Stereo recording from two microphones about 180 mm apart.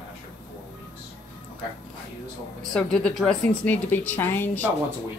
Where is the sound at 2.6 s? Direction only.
5° left (ahead or behind).